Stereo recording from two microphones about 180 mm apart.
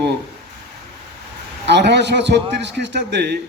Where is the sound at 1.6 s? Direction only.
70° right (ahead or behind).